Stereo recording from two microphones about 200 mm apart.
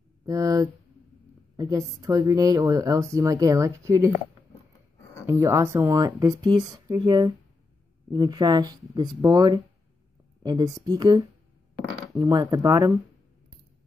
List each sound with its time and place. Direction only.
0.2 s a woman's voice: 15° right (ahead or behind)
5.2 s speech: 15° right (ahead or behind)